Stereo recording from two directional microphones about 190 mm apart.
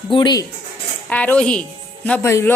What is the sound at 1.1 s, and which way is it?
A woman's voice, 10° left (ahead or behind).